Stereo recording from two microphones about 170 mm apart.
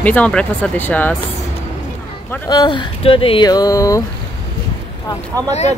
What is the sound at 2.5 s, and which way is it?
Speech, 25° left (ahead or behind).